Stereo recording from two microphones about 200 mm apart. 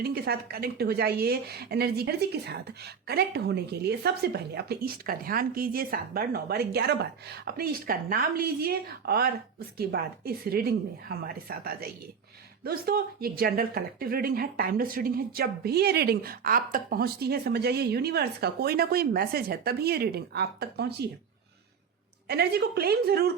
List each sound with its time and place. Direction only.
0.0 s a woman's voice: 50° right (ahead or behind)
22.3 s a woman's voice: 55° right (ahead or behind)